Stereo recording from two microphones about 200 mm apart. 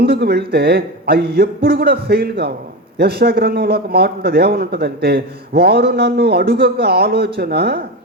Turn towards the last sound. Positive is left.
turn(degrees=-55)  # may be behind; listen again after turning